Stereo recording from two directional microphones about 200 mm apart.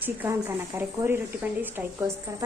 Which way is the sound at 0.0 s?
10° right (ahead or behind).